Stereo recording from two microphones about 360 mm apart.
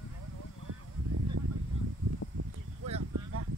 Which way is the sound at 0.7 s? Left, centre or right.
Right.